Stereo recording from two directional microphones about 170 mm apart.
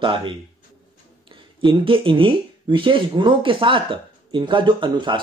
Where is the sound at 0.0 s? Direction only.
30° right (ahead or behind).